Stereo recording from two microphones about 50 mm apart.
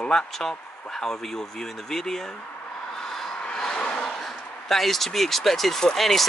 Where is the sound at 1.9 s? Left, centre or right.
Centre.